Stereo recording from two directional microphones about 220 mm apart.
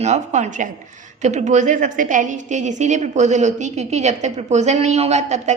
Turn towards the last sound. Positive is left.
turn(degrees=-30)  # may be behind; listen again after turning